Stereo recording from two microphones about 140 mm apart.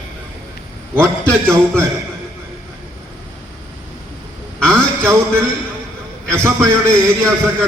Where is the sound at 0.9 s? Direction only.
20° right (ahead or behind).